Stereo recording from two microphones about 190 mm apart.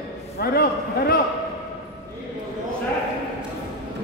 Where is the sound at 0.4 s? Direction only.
55° left (ahead or behind).